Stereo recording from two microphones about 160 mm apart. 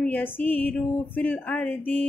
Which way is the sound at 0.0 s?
10° left (ahead or behind).